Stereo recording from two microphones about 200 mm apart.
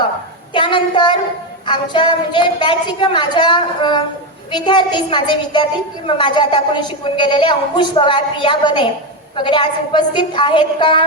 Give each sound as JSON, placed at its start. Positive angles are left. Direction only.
{"t": 0.5, "sound": "a woman's voice", "side_deg": 25}